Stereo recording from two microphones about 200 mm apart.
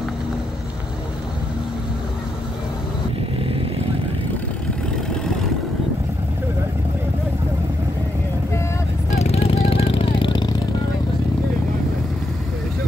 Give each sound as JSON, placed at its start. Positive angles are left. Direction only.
{"t": 9.1, "sound": "vehicle", "side_deg": 35}